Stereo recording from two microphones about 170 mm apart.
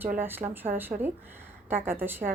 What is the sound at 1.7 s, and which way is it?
Speech, 15° right (ahead or behind).